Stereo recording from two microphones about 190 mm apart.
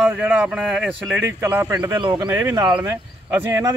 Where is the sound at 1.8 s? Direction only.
25° right (ahead or behind).